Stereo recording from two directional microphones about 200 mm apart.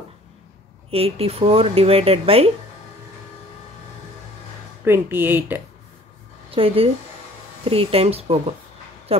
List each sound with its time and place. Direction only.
0.8 s speech: 30° right (ahead or behind)
4.8 s speech: 10° right (ahead or behind)
6.5 s speech: 30° right (ahead or behind)